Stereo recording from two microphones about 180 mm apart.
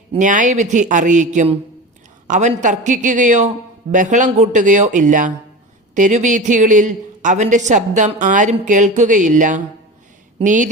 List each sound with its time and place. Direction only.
0.2 s a man's voice: 45° right (ahead or behind)